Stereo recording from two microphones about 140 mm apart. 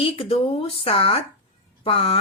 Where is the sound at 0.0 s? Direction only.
45° left (ahead or behind).